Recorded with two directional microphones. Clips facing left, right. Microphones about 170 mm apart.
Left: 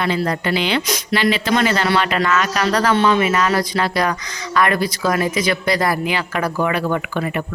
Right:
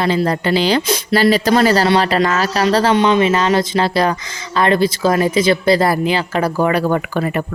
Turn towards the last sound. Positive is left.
turn(degrees=-40)  # may be behind; listen again after turning